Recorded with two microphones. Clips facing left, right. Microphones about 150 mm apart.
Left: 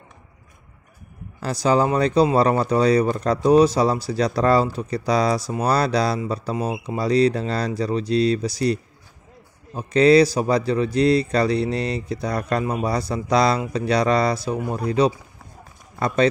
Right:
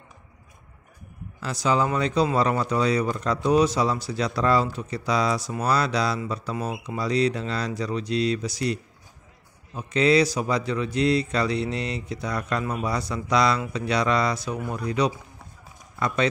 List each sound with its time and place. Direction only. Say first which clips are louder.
1.4 s speech: left 4 dB; 40° left (ahead or behind)
9.8 s speech: left 6 dB; 35° left (ahead or behind)